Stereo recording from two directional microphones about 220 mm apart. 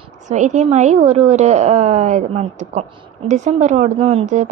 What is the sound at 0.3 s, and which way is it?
A woman's voice, 35° right (ahead or behind).